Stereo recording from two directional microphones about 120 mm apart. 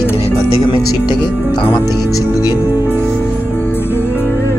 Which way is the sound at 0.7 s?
40° left (ahead or behind).